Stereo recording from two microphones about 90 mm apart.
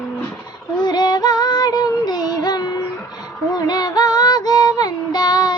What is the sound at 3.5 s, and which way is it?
Child singing, 50° left (ahead or behind).